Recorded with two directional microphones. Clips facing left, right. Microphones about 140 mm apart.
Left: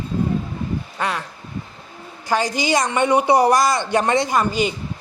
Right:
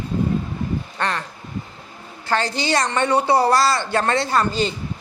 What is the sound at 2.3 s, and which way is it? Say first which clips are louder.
A woman's voice: left 2 dB; 10° left (ahead or behind).